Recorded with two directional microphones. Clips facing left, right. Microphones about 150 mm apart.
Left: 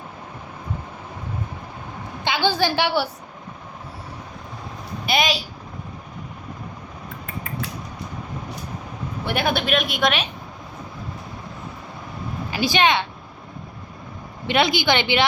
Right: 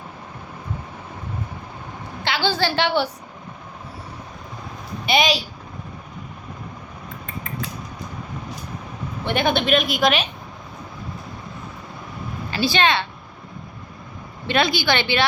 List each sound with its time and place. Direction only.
2.2 s a woman's voice: 15° left (ahead or behind)
5.0 s a woman's voice: centre (ahead or behind)
9.2 s a woman's voice: 5° left (ahead or behind)
12.5 s speech: 15° left (ahead or behind)
14.4 s a woman's voice: 15° left (ahead or behind)